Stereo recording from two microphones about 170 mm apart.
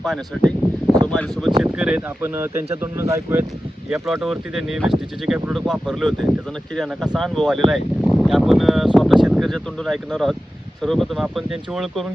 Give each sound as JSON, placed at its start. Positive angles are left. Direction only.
{"t": 0.0, "sound": "speech", "side_deg": 0}
{"t": 1.6, "sound": "speech", "side_deg": -5}
{"t": 3.8, "sound": "speech", "side_deg": -5}